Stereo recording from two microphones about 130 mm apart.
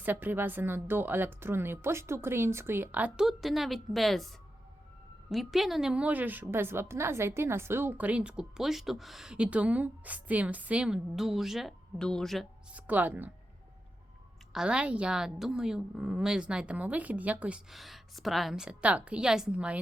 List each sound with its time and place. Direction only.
0.0 s a woman's voice: 15° right (ahead or behind); by 4.3 s centre (ahead or behind)
5.3 s a woman's voice: centre (ahead or behind)
12.7 s a woman's voice: 10° right (ahead or behind)
14.5 s a woman's voice: 5° right (ahead or behind)